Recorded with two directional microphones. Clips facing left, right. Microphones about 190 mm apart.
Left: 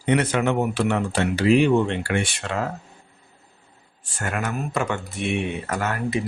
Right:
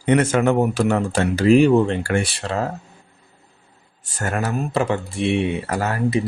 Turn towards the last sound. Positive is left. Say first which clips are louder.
# right 4 dB
turn(degrees=-35)  # may be behind; listen again after turning